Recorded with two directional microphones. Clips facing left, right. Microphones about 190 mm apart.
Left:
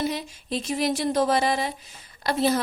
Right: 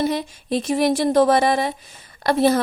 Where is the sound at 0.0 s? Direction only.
55° right (ahead or behind).